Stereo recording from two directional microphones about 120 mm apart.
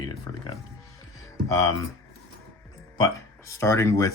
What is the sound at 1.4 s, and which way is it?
Speech, 25° left (ahead or behind).